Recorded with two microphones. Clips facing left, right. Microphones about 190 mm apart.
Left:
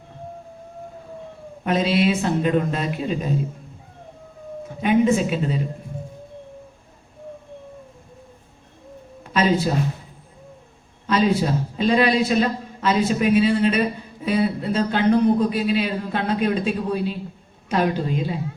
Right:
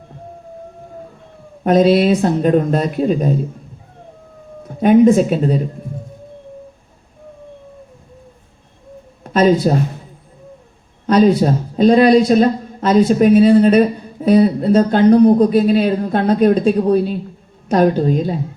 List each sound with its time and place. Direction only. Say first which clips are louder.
1.6 s a man's voice: right 8 dB; 45° right (ahead or behind)
4.8 s a man's voice: right 8 dB; 50° right (ahead or behind)
9.2 s speech: right 7 dB; 45° right (ahead or behind)
11.0 s a man's voice: right 8 dB; 45° right (ahead or behind)